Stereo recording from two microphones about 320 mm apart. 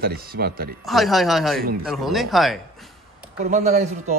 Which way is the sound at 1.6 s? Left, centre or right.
Right.